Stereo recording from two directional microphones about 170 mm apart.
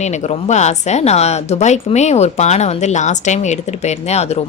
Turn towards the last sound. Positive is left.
turn(degrees=40)  # may be behind; listen again after turning